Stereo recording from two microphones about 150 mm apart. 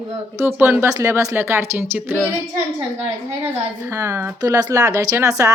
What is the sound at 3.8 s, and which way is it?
Speech, 20° right (ahead or behind).